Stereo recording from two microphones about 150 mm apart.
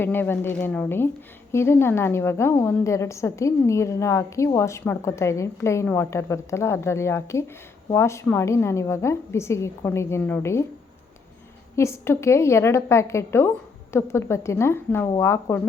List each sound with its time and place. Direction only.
0.0 s a woman's voice: 15° left (ahead or behind)
11.8 s a woman's voice: 20° left (ahead or behind)